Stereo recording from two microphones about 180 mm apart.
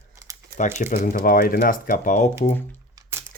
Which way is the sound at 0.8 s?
45° left (ahead or behind).